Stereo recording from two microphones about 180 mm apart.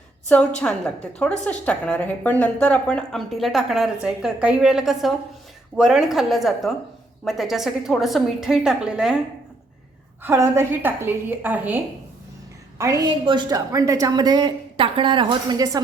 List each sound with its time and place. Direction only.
0.6 s a woman's voice: 5° left (ahead or behind)
10.2 s a woman's voice: 15° right (ahead or behind)
12.8 s a woman's voice: 20° right (ahead or behind)